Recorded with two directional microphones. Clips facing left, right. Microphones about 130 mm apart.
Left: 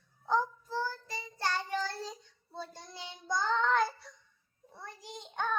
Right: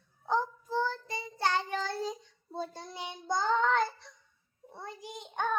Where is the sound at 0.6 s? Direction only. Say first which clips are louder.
Right 4 dB; 20° right (ahead or behind).